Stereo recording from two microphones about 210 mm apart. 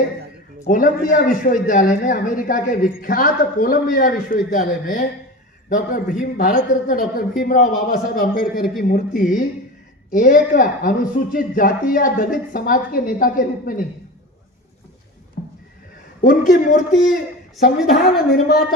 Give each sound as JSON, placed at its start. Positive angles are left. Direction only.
{"t": 0.7, "sound": "speech", "side_deg": 40}
{"t": 16.2, "sound": "speech", "side_deg": 40}
{"t": 17.6, "sound": "a woman's voice", "side_deg": 0}
{"t": 18.3, "sound": "speech", "side_deg": 50}